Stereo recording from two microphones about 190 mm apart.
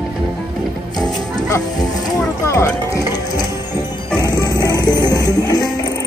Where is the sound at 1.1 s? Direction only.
20° left (ahead or behind).